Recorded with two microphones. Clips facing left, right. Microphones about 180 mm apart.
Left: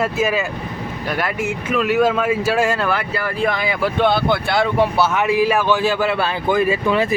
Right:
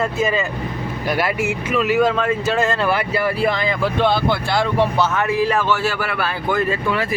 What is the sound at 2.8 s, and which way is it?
Speech, 10° right (ahead or behind).